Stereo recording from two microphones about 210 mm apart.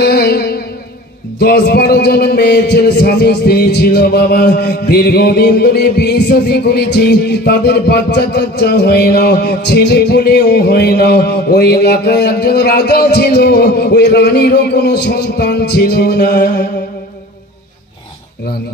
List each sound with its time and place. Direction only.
0.0 s music: 50° left (ahead or behind)
1.4 s a man's voice: 50° left (ahead or behind)